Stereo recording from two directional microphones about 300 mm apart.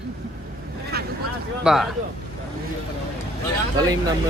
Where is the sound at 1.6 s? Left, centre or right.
Centre.